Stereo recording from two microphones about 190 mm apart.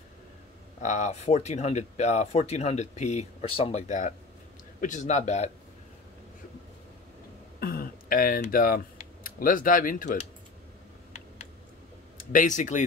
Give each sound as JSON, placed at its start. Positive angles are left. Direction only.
{"t": 0.8, "sound": "speech", "side_deg": 35}
{"t": 7.6, "sound": "speech", "side_deg": 50}
{"t": 12.2, "sound": "speech", "side_deg": 45}